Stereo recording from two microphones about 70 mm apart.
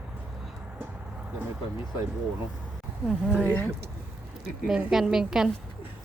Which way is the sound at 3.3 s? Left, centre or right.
Left.